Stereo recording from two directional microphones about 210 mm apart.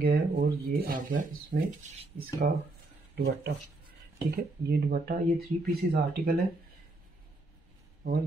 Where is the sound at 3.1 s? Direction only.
50° right (ahead or behind).